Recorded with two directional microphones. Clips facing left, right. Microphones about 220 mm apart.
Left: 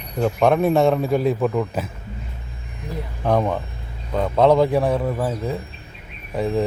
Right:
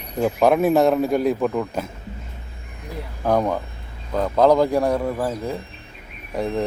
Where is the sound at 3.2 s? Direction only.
Centre (ahead or behind).